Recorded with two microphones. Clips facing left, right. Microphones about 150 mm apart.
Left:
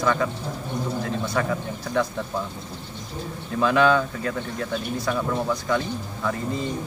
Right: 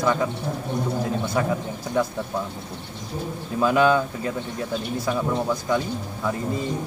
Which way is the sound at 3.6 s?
10° right (ahead or behind).